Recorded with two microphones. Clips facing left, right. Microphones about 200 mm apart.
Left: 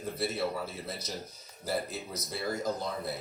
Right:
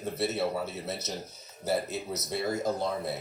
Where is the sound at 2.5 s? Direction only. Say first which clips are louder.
Right 3 dB; 25° right (ahead or behind).